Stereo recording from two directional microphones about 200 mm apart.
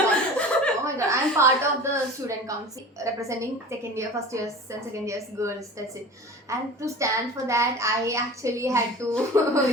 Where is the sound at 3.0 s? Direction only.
15° right (ahead or behind).